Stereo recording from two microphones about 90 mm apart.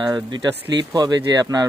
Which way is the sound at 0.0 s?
55° right (ahead or behind).